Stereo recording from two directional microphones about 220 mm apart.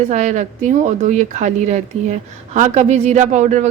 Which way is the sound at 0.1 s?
30° right (ahead or behind).